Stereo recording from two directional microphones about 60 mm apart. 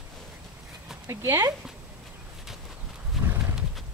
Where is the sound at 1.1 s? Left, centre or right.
Right.